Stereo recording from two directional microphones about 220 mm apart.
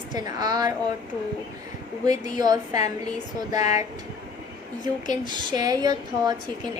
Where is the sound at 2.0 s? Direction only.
20° right (ahead or behind).